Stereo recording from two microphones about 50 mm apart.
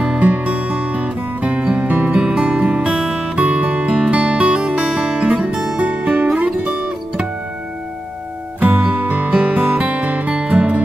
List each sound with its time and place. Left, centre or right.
0.0 s music: right
3.3 s music: right; by 5.8 s centre
5.8 s music: right
8.5 s music: right